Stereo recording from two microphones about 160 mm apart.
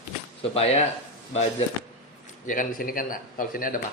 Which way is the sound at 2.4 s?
60° left (ahead or behind).